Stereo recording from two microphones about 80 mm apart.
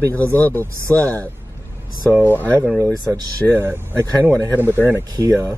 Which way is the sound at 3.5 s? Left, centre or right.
Right.